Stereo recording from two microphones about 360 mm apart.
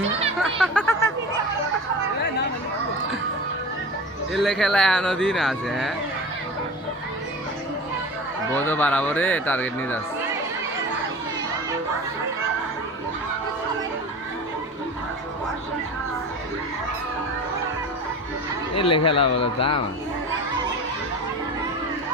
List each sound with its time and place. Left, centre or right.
0.4 s a sound: centre
4.3 s speech: centre
8.5 s speech: centre
18.7 s speech: left